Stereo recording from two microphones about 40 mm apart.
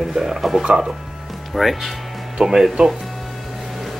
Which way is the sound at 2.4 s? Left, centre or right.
Centre.